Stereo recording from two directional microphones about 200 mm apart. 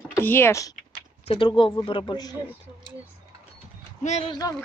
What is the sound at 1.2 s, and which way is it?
Speech, 25° left (ahead or behind).